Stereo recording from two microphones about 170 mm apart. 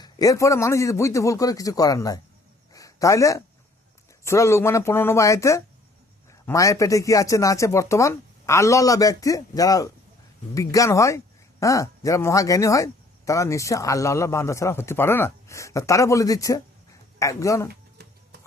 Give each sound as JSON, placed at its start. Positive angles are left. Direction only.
{"t": 0.0, "sound": "speech", "side_deg": 20}
{"t": 2.7, "sound": "a sound", "side_deg": 20}
{"t": 4.2, "sound": "speech", "side_deg": 15}
{"t": 17.7, "sound": "music", "side_deg": -70}